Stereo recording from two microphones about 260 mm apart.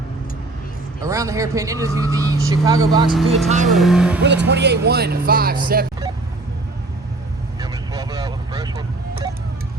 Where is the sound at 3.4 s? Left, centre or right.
Right.